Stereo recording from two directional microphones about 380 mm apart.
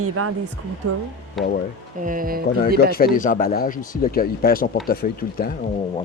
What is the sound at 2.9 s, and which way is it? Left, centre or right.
Speech, left.